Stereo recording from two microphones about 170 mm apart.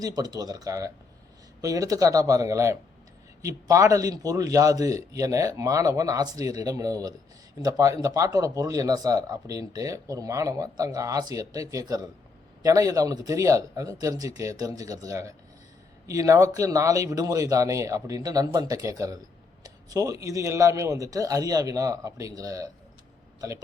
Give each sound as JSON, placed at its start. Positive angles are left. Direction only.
{"t": 0.0, "sound": "speech", "side_deg": -25}